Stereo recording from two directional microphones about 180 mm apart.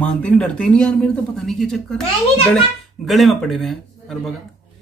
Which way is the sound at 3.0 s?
Centre (ahead or behind).